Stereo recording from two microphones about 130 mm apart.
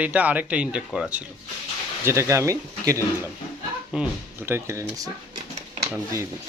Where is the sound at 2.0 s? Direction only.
20° right (ahead or behind).